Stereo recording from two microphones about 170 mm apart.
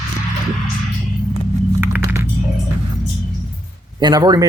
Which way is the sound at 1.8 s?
10° right (ahead or behind).